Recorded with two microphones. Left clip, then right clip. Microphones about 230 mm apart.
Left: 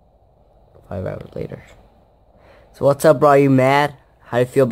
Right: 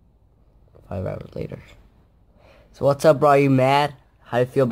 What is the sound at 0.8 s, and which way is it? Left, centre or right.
Speech, centre.